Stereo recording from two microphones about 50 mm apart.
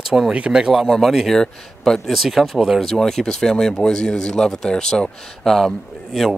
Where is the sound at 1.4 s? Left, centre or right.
Centre.